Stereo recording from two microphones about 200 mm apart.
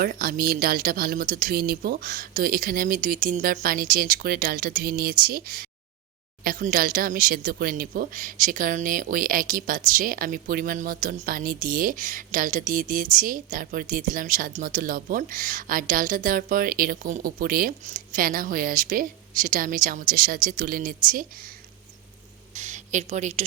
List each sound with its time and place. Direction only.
0.0 s speech: 45° right (ahead or behind)
22.5 s speech: 35° right (ahead or behind)